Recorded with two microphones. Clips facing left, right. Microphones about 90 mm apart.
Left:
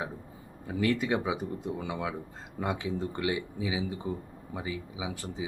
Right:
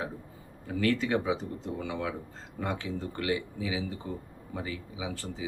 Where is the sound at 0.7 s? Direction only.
15° left (ahead or behind).